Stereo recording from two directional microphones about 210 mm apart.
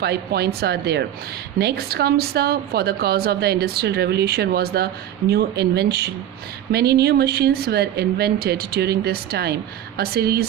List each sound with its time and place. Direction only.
0.0 s a woman's voice: 50° right (ahead or behind)